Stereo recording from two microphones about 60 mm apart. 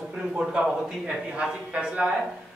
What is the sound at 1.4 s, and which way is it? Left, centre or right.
Speech, centre.